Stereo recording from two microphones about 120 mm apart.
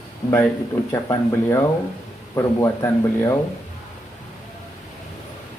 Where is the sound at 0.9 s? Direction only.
20° left (ahead or behind).